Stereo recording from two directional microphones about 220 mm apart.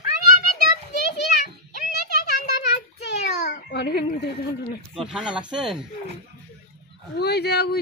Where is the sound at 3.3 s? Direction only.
50° left (ahead or behind).